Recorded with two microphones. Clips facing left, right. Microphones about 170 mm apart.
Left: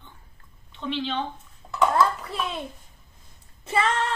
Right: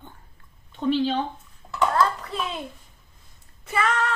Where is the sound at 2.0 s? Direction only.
Centre (ahead or behind).